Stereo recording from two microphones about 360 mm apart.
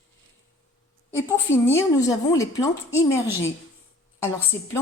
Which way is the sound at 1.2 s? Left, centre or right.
Centre.